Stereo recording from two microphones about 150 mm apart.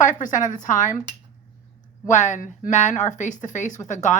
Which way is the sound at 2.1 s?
55° left (ahead or behind).